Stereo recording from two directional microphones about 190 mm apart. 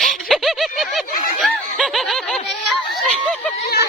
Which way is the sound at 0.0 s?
Centre (ahead or behind).